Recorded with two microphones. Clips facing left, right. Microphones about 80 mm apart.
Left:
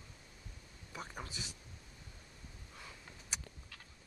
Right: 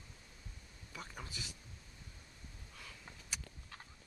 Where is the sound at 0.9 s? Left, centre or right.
Left.